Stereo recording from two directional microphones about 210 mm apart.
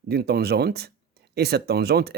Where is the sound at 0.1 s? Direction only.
50° right (ahead or behind).